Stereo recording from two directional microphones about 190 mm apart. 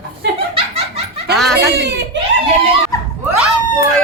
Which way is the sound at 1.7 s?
60° right (ahead or behind).